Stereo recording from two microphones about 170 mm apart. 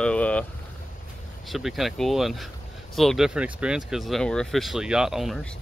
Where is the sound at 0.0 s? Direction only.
5° left (ahead or behind).